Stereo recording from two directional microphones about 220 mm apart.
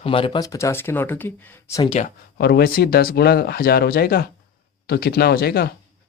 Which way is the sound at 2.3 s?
45° left (ahead or behind).